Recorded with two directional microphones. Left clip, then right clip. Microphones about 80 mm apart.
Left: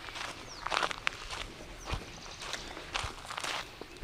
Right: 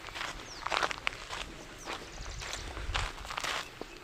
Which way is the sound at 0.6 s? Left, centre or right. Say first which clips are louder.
Even; right.